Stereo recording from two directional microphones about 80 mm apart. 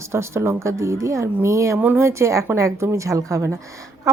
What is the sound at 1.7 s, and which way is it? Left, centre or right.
A woman's voice, right.